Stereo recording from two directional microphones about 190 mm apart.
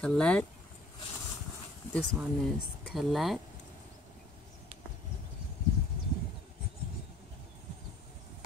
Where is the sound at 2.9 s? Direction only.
Centre (ahead or behind).